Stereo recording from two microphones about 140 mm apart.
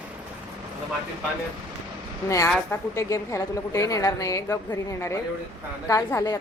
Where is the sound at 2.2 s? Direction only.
20° left (ahead or behind).